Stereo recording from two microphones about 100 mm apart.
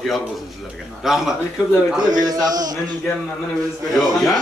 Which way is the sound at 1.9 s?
40° right (ahead or behind).